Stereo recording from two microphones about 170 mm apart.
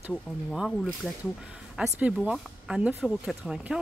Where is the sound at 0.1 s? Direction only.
5° left (ahead or behind).